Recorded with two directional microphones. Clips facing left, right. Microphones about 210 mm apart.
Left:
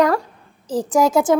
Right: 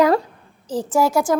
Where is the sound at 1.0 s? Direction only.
20° left (ahead or behind).